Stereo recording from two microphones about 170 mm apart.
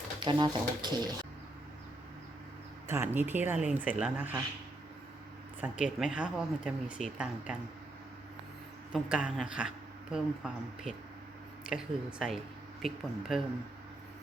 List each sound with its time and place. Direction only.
0.2 s speech: 30° right (ahead or behind)
2.8 s speech: 15° right (ahead or behind)
5.5 s speech: 10° right (ahead or behind)
8.9 s speech: 5° right (ahead or behind)